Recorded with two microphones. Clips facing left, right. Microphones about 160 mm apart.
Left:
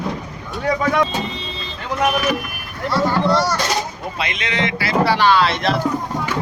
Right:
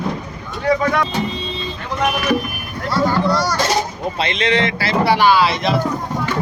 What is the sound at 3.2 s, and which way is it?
Speech, 25° left (ahead or behind).